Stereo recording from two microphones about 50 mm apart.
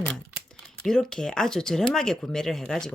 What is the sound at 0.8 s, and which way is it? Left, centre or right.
Speech, centre.